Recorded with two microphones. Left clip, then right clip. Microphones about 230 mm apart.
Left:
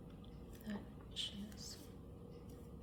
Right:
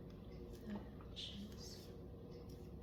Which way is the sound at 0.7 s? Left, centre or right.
Left.